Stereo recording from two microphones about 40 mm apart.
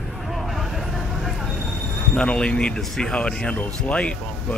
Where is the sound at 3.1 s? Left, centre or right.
Left.